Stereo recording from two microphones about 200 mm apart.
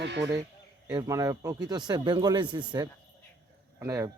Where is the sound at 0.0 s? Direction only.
60° right (ahead or behind).